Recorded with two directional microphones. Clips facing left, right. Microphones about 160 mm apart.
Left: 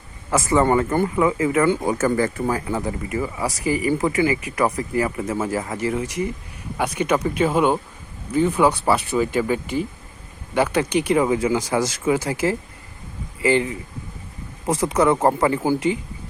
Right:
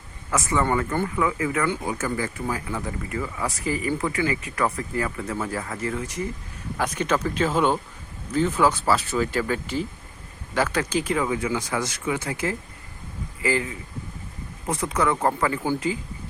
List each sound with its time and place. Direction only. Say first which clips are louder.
0.3 s speech: left 6 dB; 30° left (ahead or behind)
1.8 s speech: left 7 dB; 50° left (ahead or behind)
2.6 s speech: left 6 dB; 30° left (ahead or behind)
3.1 s speech: left 2 dB; 20° left (ahead or behind)
10.8 s speech: left 4 dB; 70° left (ahead or behind)
11.1 s speech: left 8 dB; 30° left (ahead or behind)
12.0 s speech: left 6 dB; 35° left (ahead or behind)
14.7 s speech: left 6 dB; 90° left
14.9 s speech: left 5 dB; 30° left (ahead or behind)